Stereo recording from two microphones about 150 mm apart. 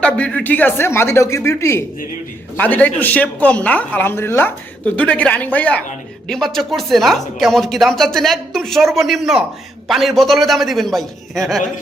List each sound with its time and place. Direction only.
0.0 s speech: 5° left (ahead or behind)